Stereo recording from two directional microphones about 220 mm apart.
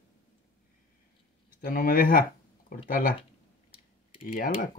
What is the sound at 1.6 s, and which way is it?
Speech, 40° left (ahead or behind).